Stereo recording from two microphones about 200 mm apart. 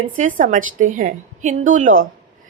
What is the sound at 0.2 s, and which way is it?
A woman's voice, 40° right (ahead or behind).